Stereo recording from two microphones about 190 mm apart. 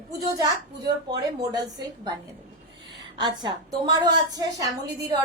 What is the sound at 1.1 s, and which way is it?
Speech, 20° right (ahead or behind).